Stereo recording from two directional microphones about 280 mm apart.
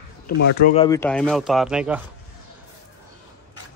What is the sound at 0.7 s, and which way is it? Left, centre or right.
Speech, centre.